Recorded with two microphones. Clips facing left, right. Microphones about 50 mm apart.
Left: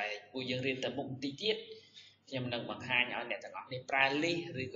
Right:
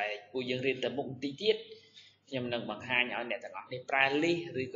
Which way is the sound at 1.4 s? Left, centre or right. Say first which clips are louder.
Right 7 dB; centre.